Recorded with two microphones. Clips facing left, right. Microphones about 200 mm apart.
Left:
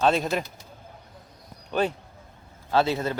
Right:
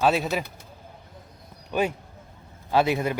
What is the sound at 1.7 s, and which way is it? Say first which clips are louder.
A man's voice: even; 10° right (ahead or behind).